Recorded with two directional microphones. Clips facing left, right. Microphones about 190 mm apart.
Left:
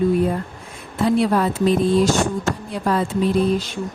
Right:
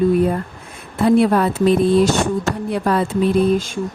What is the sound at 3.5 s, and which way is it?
Speech, 45° right (ahead or behind).